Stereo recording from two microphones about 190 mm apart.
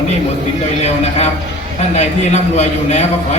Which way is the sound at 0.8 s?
35° left (ahead or behind).